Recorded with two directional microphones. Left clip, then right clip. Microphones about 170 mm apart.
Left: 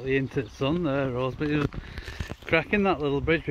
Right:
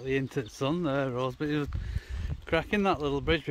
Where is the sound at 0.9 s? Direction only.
40° right (ahead or behind).